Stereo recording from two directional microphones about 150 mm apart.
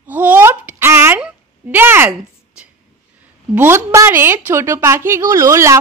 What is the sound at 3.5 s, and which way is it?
A woman's voice, 15° right (ahead or behind).